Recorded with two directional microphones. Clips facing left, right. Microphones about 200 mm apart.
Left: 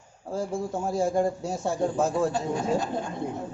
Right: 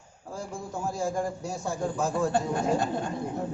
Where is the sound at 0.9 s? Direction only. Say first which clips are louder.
Left 7 dB; 25° left (ahead or behind).